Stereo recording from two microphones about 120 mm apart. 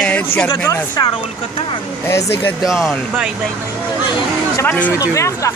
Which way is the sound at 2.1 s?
20° left (ahead or behind).